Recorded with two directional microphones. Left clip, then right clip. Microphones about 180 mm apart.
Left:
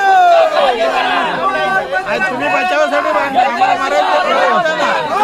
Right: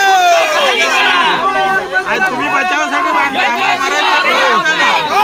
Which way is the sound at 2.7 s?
50° left (ahead or behind).